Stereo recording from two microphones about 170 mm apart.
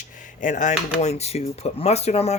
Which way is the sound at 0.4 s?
45° left (ahead or behind).